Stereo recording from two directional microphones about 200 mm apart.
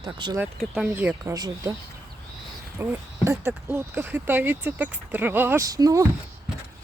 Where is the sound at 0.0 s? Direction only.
20° right (ahead or behind).